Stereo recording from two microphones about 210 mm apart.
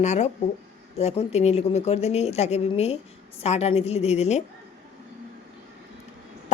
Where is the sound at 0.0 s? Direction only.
35° left (ahead or behind).